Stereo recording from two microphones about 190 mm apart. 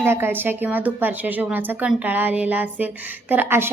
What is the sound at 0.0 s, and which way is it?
A woman's voice, 10° right (ahead or behind).